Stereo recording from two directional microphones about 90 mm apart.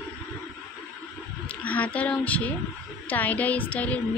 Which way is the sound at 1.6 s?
15° left (ahead or behind).